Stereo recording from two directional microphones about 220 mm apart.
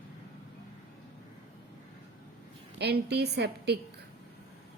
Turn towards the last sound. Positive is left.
turn(degrees=-50)  # may be behind; listen again after turning